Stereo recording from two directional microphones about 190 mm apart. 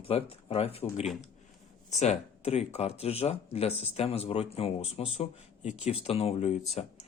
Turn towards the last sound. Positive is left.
turn(degrees=35)  # may be behind; listen again after turning